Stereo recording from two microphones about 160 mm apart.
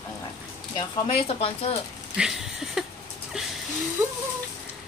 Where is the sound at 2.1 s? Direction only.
5° right (ahead or behind).